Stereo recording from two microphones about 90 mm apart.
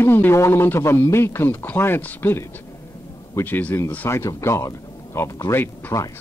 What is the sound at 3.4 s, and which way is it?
Speech, 20° left (ahead or behind).